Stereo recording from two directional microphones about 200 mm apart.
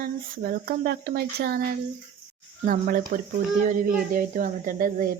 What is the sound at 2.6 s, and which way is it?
Speech, 40° right (ahead or behind).